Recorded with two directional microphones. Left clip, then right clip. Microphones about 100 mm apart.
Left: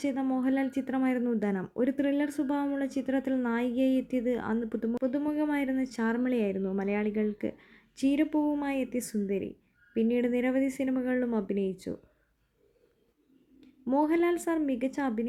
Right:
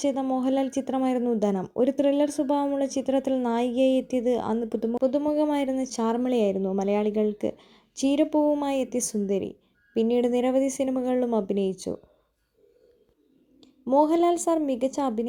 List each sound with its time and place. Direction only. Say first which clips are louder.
0.0 s speech: right 5 dB; 25° right (ahead or behind)
8.4 s speech: right 7 dB; 15° right (ahead or behind)
8.6 s speech: right 6 dB; 30° right (ahead or behind)
14.0 s speech: right 5 dB; 20° right (ahead or behind)